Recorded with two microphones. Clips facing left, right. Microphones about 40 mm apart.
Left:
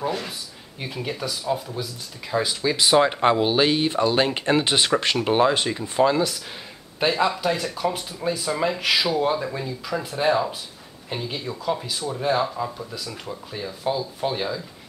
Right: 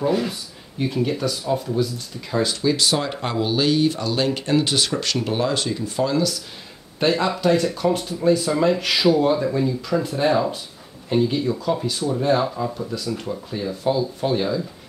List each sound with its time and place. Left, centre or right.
0.0 s speech: centre; by 6.3 s left
7.0 s speech: centre